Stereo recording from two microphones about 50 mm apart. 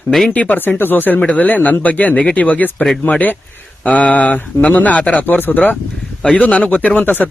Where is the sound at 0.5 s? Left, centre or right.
Left.